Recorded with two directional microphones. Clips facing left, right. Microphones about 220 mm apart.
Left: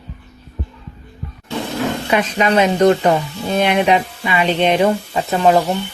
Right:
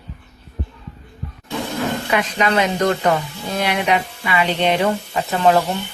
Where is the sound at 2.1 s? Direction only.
20° left (ahead or behind).